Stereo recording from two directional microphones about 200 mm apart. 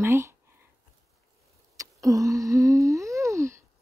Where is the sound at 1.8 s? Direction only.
15° right (ahead or behind).